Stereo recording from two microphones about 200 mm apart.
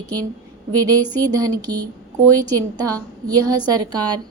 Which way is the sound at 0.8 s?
20° right (ahead or behind).